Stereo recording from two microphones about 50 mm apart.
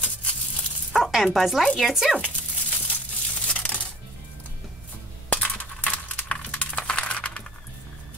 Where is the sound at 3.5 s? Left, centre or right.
Left.